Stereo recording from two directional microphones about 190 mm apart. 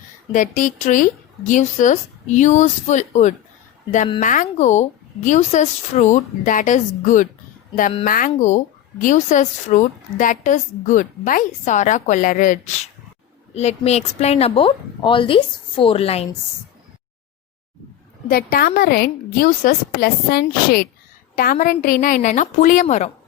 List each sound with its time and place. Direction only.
0.3 s a woman's voice: 45° left (ahead or behind)
18.3 s a woman's voice: 50° left (ahead or behind)